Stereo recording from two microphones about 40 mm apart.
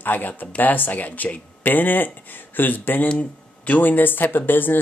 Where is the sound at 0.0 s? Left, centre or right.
Left.